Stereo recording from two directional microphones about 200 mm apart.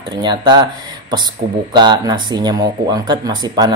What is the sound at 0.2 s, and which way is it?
Speech, 20° right (ahead or behind).